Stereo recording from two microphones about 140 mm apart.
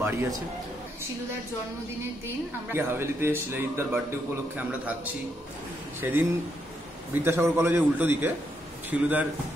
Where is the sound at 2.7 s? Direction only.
15° right (ahead or behind).